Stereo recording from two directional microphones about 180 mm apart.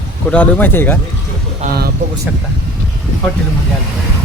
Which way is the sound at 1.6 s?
40° right (ahead or behind).